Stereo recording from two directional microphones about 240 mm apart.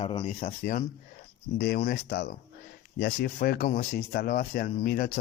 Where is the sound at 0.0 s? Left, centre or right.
Left.